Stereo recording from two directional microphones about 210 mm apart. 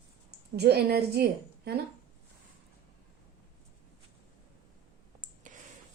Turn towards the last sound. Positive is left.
turn(degrees=-35)  # may be behind; listen again after turning